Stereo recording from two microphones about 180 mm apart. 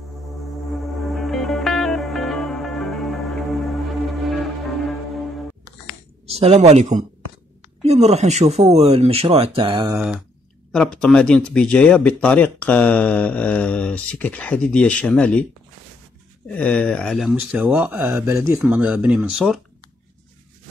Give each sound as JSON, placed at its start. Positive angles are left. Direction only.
{"t": 1.1, "sound": "music", "side_deg": 0}
{"t": 6.3, "sound": "speech", "side_deg": -35}
{"t": 9.9, "sound": "a sound", "side_deg": -5}
{"t": 10.7, "sound": "speech", "side_deg": 5}
{"t": 16.4, "sound": "speech", "side_deg": 10}